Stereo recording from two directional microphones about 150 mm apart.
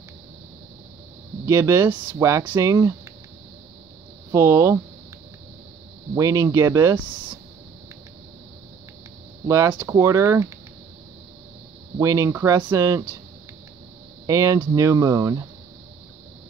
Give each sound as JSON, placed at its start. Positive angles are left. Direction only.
{"t": 1.4, "sound": "speech", "side_deg": -20}
{"t": 4.3, "sound": "speech", "side_deg": -20}
{"t": 6.1, "sound": "speech", "side_deg": -20}
{"t": 9.5, "sound": "speech", "side_deg": -20}
{"t": 12.0, "sound": "speech", "side_deg": -20}
{"t": 14.2, "sound": "speech", "side_deg": -20}